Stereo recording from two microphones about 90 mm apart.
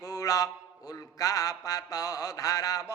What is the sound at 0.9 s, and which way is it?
Mantra, 40° left (ahead or behind).